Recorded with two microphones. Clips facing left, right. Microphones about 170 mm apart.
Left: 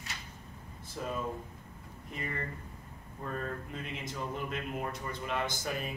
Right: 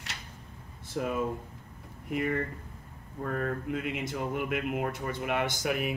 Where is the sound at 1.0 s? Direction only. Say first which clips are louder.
Right 6 dB; 65° right (ahead or behind).